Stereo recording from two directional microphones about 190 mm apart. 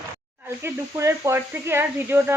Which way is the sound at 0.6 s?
15° right (ahead or behind).